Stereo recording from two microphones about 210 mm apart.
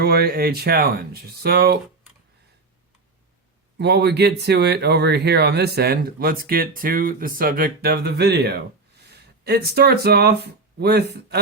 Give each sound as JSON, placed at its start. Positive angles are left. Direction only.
{"t": 0.0, "sound": "speech", "side_deg": -50}
{"t": 3.8, "sound": "speech", "side_deg": -50}